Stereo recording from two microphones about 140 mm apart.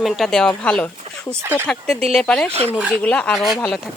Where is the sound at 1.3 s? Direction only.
15° right (ahead or behind).